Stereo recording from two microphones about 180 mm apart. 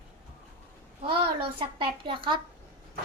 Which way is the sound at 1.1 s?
30° right (ahead or behind).